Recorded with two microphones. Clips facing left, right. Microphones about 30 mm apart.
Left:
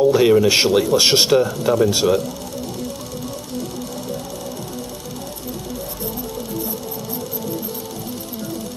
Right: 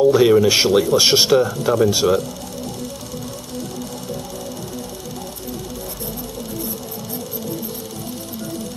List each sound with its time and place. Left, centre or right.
0.0 s speech: centre